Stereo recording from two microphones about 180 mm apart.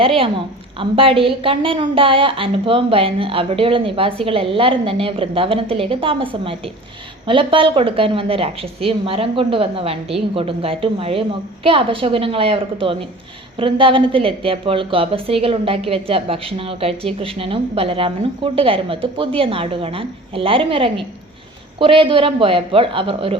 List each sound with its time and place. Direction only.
0.0 s a woman's voice: 30° right (ahead or behind)